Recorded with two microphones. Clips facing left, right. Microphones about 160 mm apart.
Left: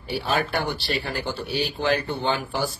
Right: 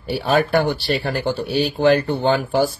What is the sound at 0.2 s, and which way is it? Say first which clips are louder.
Speech: right 8 dB; 50° right (ahead or behind).